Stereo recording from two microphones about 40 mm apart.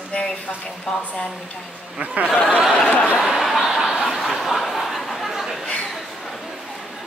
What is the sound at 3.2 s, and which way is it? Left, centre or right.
Chuckle, centre.